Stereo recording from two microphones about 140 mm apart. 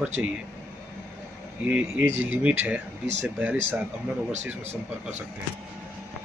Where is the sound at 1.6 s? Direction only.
10° right (ahead or behind).